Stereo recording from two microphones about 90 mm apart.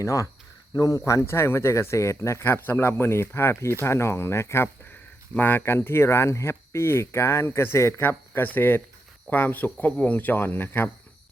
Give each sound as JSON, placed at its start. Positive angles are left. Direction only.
{"t": 0.0, "sound": "speech", "side_deg": 35}